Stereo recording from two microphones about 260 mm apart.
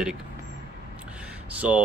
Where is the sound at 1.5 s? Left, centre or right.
Centre.